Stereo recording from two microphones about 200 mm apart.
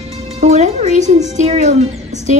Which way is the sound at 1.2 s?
35° right (ahead or behind).